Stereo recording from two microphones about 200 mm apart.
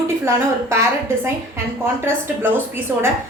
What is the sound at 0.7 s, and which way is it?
A woman's voice, 15° right (ahead or behind).